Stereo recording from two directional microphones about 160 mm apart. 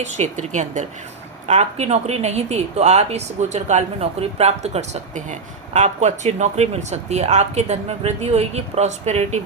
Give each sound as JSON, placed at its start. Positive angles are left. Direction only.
{"t": 0.0, "sound": "speech", "side_deg": -45}